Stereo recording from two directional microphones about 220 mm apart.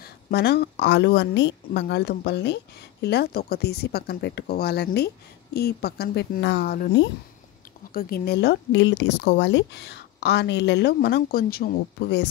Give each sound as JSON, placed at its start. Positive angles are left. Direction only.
{"t": 0.0, "sound": "a woman's voice", "side_deg": 45}